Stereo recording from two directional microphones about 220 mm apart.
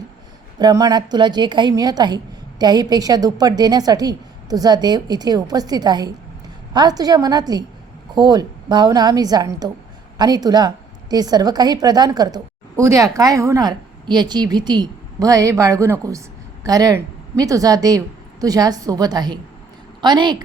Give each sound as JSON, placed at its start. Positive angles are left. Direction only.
{"t": 0.6, "sound": "a woman's voice", "side_deg": -15}